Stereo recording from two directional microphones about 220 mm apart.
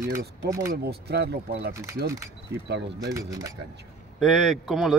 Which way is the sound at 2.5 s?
50° right (ahead or behind).